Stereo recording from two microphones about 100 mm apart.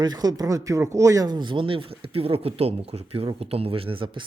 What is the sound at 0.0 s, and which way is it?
Speech, 40° right (ahead or behind).